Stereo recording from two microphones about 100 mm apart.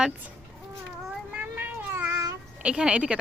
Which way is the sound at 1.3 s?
15° right (ahead or behind).